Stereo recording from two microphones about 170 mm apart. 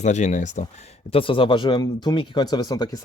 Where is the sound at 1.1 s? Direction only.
30° left (ahead or behind).